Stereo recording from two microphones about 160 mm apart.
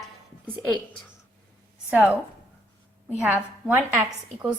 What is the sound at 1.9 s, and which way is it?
A woman's voice, 10° right (ahead or behind).